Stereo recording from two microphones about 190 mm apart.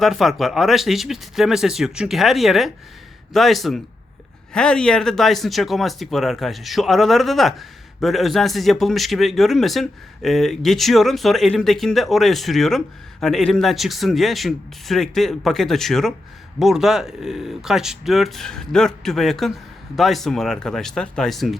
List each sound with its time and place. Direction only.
0.0 s speech: centre (ahead or behind)